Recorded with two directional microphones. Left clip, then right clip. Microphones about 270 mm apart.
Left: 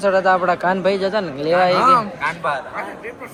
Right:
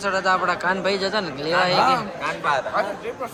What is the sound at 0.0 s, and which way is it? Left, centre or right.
Speech, centre.